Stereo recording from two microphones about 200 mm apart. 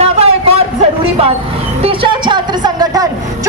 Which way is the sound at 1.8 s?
25° right (ahead or behind).